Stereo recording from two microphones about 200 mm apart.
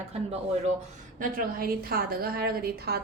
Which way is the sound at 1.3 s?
45° right (ahead or behind).